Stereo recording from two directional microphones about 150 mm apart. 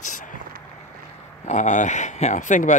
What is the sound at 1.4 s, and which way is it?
Speech, 50° left (ahead or behind).